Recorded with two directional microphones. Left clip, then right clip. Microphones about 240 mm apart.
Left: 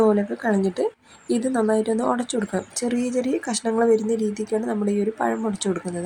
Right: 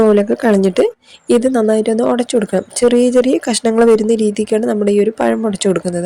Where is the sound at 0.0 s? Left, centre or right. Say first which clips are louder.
Right 9 dB; right.